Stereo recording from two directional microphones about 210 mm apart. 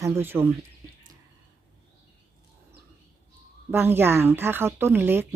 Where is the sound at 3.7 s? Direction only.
10° right (ahead or behind).